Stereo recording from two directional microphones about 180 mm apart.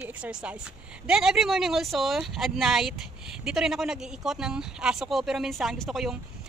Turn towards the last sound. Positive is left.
turn(degrees=0)  # may be behind; listen again after turning